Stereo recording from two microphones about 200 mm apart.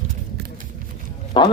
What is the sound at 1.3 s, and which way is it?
Speech, 25° left (ahead or behind).